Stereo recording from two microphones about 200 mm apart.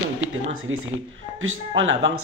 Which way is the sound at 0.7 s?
85° right.